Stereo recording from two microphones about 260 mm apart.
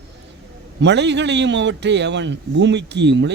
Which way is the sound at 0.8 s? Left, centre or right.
Right.